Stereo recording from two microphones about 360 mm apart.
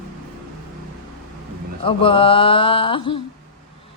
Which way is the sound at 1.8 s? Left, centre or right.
Centre.